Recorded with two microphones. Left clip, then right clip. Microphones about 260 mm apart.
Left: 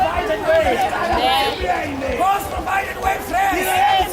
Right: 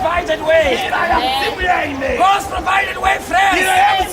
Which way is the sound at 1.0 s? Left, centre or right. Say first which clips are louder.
Right 2 dB; centre.